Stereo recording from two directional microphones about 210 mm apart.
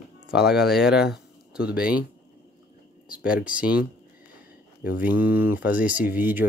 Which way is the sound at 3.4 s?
5° right (ahead or behind).